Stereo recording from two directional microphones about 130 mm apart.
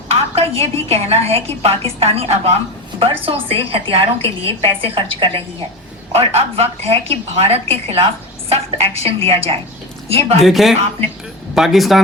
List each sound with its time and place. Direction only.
0.1 s a woman's voice: 50° right (ahead or behind)
10.4 s speech: centre (ahead or behind)